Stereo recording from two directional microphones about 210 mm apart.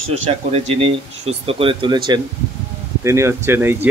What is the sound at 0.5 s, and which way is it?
Speech, 30° right (ahead or behind).